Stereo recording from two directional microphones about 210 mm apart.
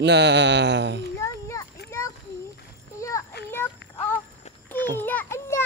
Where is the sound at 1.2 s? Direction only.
15° left (ahead or behind).